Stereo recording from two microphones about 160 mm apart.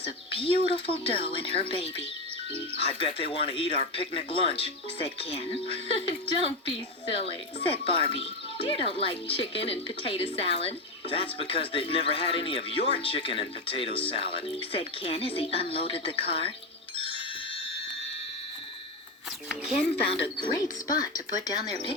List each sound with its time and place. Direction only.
0.0 s a woman's voice: 35° left (ahead or behind)
19.5 s speech: 5° right (ahead or behind)
20.1 s a woman's voice: 30° left (ahead or behind)